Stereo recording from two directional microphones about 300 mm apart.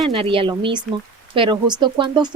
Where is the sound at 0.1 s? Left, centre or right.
Centre.